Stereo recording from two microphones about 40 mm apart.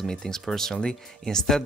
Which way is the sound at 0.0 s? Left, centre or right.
Centre.